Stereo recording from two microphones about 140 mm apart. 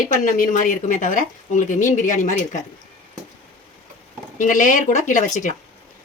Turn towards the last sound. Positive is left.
turn(degrees=60)  # may be behind; listen again after turning